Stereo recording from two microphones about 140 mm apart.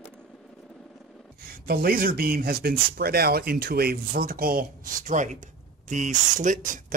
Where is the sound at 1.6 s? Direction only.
90° right.